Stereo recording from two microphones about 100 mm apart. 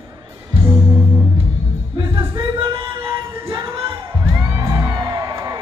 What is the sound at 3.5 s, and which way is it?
Music, 50° right (ahead or behind).